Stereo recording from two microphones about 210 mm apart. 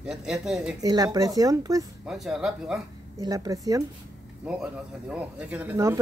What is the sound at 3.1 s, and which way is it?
Speech, 15° right (ahead or behind).